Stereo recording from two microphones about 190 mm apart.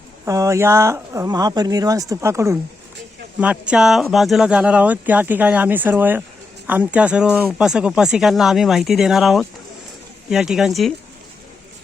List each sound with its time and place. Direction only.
0.3 s speech: 15° right (ahead or behind); by 10.9 s centre (ahead or behind)